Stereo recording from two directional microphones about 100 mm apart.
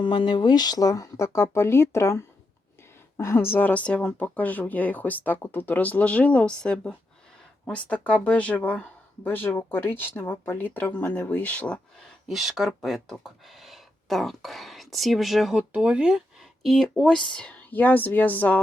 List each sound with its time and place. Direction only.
0.0 s speech: 55° left (ahead or behind); by 11.8 s 10° left (ahead or behind)
12.3 s speech: centre (ahead or behind); by 18.6 s 15° left (ahead or behind)